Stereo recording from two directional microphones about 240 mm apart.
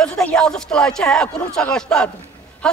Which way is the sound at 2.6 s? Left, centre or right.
Centre.